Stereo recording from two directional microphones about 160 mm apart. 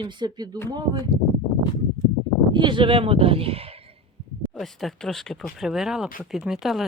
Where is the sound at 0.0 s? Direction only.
30° right (ahead or behind).